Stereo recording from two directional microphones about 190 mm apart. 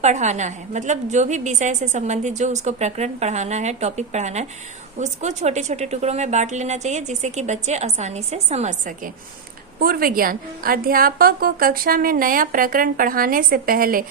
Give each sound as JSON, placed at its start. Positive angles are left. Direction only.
{"t": 0.0, "sound": "a woman's voice", "side_deg": -40}
{"t": 9.7, "sound": "a woman's voice", "side_deg": -50}